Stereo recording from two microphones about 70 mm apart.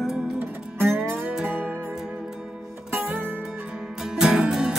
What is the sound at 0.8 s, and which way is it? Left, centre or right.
Music, right.